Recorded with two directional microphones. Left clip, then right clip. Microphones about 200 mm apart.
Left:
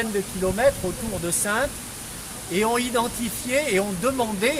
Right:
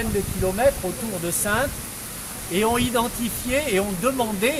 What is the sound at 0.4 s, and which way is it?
Speech, 20° left (ahead or behind).